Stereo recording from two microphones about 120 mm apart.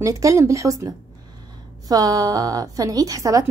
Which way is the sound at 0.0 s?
25° right (ahead or behind).